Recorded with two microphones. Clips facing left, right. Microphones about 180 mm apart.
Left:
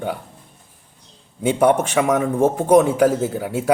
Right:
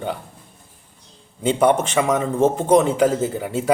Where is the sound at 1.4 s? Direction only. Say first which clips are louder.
Left 1 dB; 10° left (ahead or behind).